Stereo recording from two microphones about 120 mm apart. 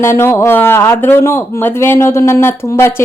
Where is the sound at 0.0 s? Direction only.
20° left (ahead or behind).